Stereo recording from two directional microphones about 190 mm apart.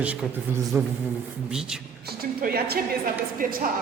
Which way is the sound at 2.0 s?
55° right (ahead or behind).